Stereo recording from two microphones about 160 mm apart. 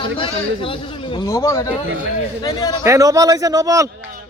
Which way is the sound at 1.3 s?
20° left (ahead or behind).